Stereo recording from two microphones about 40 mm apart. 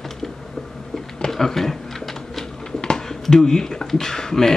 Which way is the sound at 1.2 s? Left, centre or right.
Centre.